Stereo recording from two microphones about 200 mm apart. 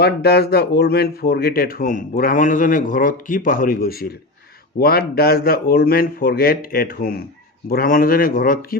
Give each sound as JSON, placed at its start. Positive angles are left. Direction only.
{"t": 0.0, "sound": "speech", "side_deg": 55}